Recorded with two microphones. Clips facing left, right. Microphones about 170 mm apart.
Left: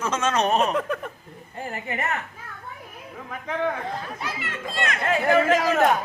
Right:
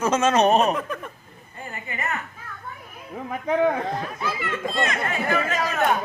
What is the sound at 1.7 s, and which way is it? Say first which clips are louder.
Speech: left 4 dB; 50° left (ahead or behind).